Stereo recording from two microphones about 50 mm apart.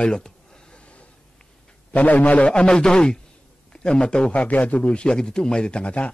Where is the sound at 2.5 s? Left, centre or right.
Centre.